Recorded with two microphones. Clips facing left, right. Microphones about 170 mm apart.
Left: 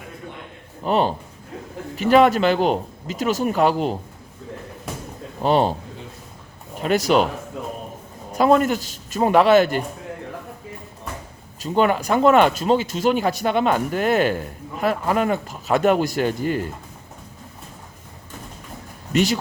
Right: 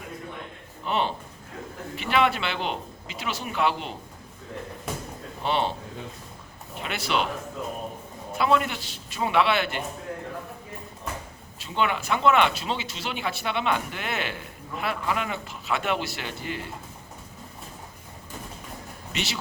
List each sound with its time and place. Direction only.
0.9 s speech: 40° left (ahead or behind)
5.4 s speech: 40° left (ahead or behind)
6.7 s speech: 40° left (ahead or behind)
8.4 s speech: 45° left (ahead or behind)
11.6 s speech: 45° left (ahead or behind)
19.1 s speech: 45° left (ahead or behind)